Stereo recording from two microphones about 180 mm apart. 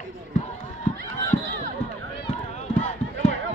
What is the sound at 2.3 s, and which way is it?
Run, 40° left (ahead or behind).